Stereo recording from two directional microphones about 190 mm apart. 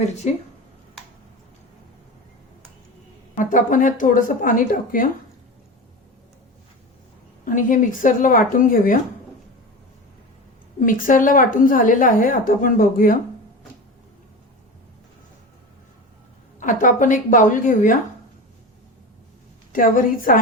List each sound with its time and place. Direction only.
3.3 s a woman's voice: 45° left (ahead or behind)
7.4 s a woman's voice: 45° left (ahead or behind)
10.8 s a woman's voice: 45° left (ahead or behind)
16.6 s a woman's voice: 45° left (ahead or behind)
19.7 s a woman's voice: 45° left (ahead or behind)